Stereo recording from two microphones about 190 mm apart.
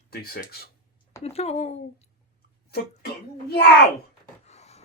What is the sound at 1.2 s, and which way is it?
Speech, 35° left (ahead or behind).